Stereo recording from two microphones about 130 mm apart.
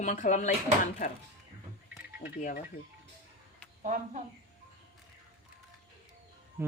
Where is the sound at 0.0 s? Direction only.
70° left (ahead or behind).